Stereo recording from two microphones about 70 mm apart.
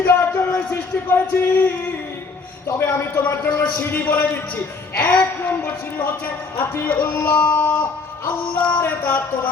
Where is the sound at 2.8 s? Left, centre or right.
Left.